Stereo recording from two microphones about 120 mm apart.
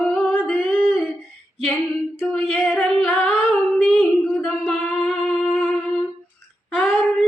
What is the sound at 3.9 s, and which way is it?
Music, 5° right (ahead or behind).